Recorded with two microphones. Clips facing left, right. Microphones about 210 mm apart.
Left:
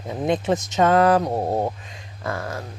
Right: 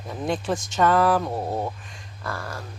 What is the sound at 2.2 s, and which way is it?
Speech, 20° left (ahead or behind).